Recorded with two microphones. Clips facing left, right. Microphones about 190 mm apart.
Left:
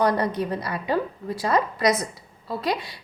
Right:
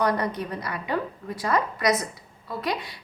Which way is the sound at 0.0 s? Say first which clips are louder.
Left 3 dB; 30° left (ahead or behind).